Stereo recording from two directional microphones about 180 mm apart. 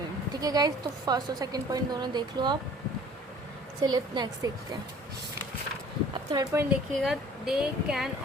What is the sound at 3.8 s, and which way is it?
Speech, 20° right (ahead or behind).